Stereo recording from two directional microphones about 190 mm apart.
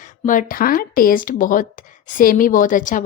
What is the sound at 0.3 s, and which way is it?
A woman's voice, 45° left (ahead or behind).